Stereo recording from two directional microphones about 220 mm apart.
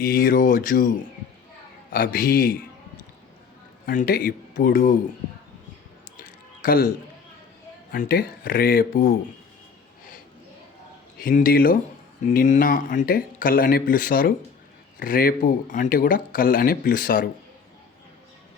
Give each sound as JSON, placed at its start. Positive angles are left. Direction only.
{"t": 0.0, "sound": "speech", "side_deg": 40}
{"t": 1.9, "sound": "speech", "side_deg": 40}
{"t": 3.8, "sound": "speech", "side_deg": 40}
{"t": 6.6, "sound": "a man's voice", "side_deg": 40}
{"t": 7.9, "sound": "speech", "side_deg": 40}
{"t": 11.2, "sound": "speech", "side_deg": 40}